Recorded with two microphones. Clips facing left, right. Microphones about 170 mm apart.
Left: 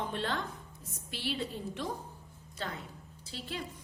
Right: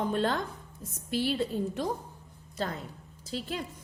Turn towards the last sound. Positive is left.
turn(degrees=-45)  # may be behind; listen again after turning